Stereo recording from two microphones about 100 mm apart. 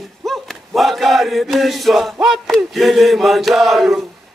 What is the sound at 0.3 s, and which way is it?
Mantra, centre (ahead or behind).